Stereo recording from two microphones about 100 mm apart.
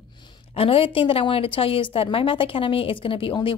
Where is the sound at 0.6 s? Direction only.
70° left (ahead or behind).